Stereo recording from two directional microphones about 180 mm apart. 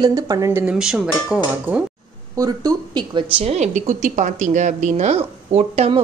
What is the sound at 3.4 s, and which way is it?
Speech, 40° right (ahead or behind).